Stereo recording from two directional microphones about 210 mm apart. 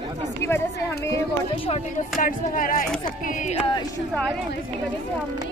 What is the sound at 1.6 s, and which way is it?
Speech, 30° left (ahead or behind).